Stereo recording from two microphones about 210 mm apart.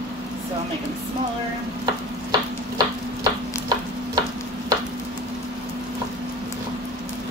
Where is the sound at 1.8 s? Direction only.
20° right (ahead or behind).